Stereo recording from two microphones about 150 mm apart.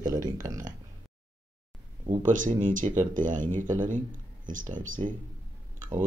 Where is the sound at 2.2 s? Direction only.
60° right (ahead or behind).